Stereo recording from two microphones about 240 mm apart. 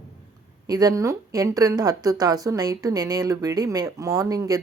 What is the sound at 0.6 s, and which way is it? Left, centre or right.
Speech, centre.